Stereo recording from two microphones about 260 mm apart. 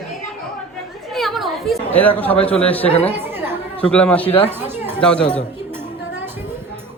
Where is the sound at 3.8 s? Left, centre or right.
Centre.